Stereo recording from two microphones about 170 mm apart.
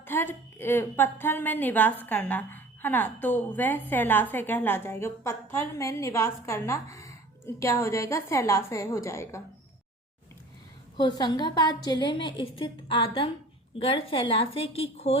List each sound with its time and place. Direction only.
0.0 s a woman's voice: 15° left (ahead or behind)
11.2 s a woman's voice: 25° left (ahead or behind)